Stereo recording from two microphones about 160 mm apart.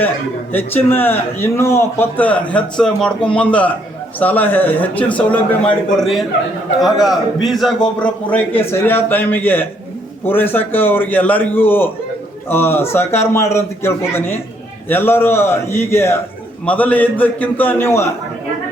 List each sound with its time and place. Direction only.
0.5 s a man's voice: 10° left (ahead or behind)